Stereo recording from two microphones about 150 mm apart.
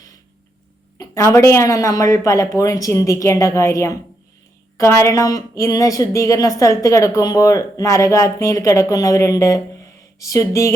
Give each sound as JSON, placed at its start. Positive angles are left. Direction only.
{"t": 0.9, "sound": "a woman's voice", "side_deg": 20}